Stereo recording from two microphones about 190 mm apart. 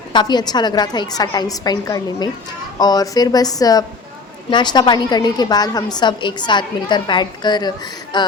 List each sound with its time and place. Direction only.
0.1 s a woman's voice: 20° left (ahead or behind)